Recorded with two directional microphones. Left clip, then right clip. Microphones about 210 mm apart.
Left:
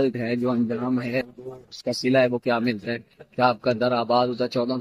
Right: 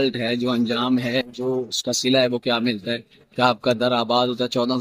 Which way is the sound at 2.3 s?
5° right (ahead or behind).